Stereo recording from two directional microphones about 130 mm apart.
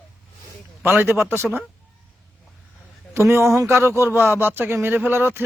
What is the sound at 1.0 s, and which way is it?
Speech, 20° right (ahead or behind).